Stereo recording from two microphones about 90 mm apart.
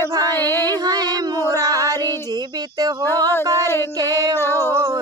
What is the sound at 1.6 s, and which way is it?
Female singing, 45° right (ahead or behind).